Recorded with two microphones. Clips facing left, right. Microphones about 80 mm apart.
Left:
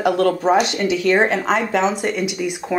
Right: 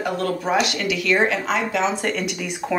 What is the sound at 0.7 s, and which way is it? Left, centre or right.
Speech, left.